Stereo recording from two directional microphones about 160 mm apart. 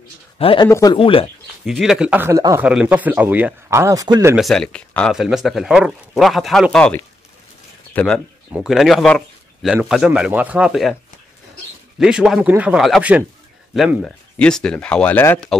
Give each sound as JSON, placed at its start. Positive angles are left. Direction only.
{"t": 0.4, "sound": "speech", "side_deg": 35}
{"t": 0.7, "sound": "speech", "side_deg": 20}
{"t": 0.9, "sound": "speech", "side_deg": 35}
{"t": 1.7, "sound": "a man's voice", "side_deg": 0}
{"t": 4.4, "sound": "speech", "side_deg": 0}
{"t": 8.5, "sound": "speech", "side_deg": -5}
{"t": 12.0, "sound": "speech", "side_deg": -5}